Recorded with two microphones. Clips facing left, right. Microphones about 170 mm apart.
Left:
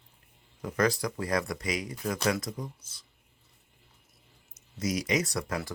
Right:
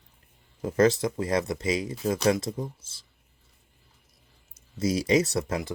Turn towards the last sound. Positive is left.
turn(degrees=-25)  # may be behind; listen again after turning